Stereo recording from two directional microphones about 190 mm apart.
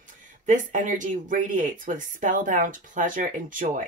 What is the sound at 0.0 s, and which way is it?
Speech, 45° right (ahead or behind).